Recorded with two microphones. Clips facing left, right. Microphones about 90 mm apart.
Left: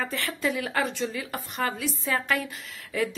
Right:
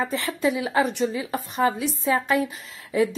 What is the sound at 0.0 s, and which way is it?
A woman's voice, 20° right (ahead or behind).